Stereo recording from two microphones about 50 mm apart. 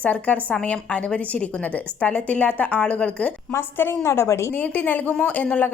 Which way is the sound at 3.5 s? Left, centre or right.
Left.